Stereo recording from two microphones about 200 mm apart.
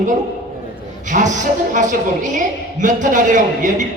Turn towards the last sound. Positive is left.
turn(degrees=-40)  # may be behind; listen again after turning